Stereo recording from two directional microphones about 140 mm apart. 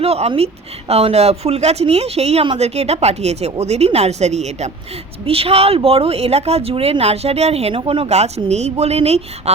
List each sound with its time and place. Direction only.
0.0 s speech: 45° right (ahead or behind)
5.2 s speech: 45° right (ahead or behind)